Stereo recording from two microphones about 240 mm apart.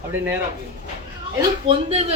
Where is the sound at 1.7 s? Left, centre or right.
Right.